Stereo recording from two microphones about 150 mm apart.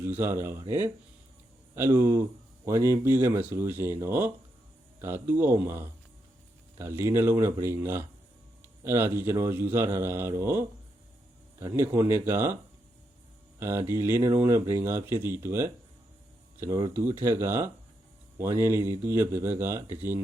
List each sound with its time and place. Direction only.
0.0 s speech: 15° right (ahead or behind)
13.6 s speech: 15° right (ahead or behind)